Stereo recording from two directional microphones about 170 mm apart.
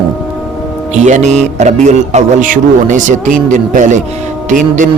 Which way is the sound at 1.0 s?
45° right (ahead or behind).